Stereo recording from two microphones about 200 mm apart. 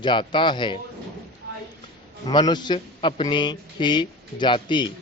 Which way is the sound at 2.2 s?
20° left (ahead or behind).